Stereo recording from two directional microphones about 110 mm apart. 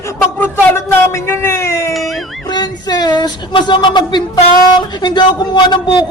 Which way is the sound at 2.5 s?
40° left (ahead or behind).